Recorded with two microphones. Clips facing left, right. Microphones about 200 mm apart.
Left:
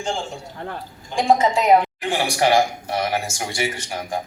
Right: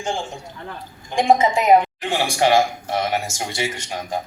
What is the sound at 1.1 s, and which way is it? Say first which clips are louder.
A woman's voice: right 1 dB; 15° right (ahead or behind).